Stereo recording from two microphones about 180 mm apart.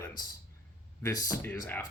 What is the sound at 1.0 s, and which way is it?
Speech, 20° left (ahead or behind).